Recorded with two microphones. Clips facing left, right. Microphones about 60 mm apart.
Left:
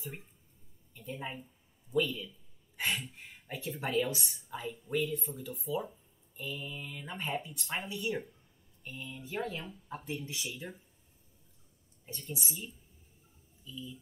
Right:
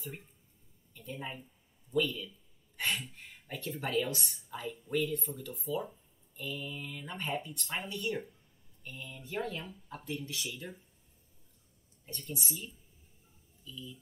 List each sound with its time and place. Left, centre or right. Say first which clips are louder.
0.9 s speech: left 1 dB; centre
9.8 s speech: left 1 dB; centre
10.4 s speech: even; centre
12.1 s speech: right 1 dB; centre
13.7 s speech: left 2 dB; centre